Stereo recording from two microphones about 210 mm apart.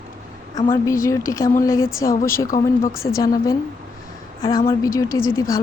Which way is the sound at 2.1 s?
40° left (ahead or behind).